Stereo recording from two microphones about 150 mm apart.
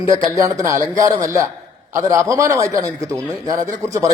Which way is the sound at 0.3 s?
20° right (ahead or behind).